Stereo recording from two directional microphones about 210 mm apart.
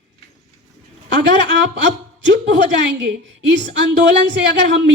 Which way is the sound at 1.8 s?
60° right (ahead or behind).